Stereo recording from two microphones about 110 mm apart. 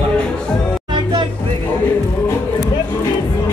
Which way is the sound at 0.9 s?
45° right (ahead or behind).